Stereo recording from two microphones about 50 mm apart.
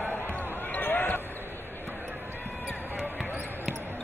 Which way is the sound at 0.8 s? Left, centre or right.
Left.